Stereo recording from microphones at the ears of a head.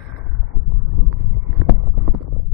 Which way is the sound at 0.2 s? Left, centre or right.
Left.